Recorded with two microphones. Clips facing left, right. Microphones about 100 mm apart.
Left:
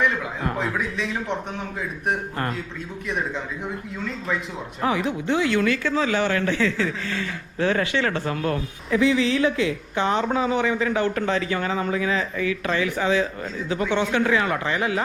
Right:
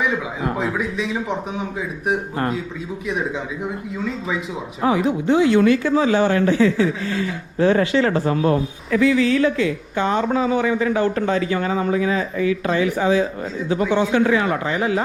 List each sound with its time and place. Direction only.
0.0 s a man's voice: 5° right (ahead or behind)
3.1 s a man's voice: centre (ahead or behind)
4.8 s a man's voice: 30° right (ahead or behind)
8.9 s speech: 25° left (ahead or behind)
10.0 s a man's voice: 40° right (ahead or behind)